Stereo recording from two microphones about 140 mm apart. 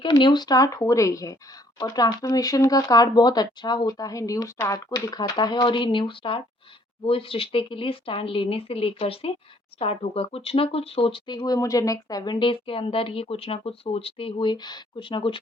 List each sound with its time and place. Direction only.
0.0 s speech: 35° left (ahead or behind)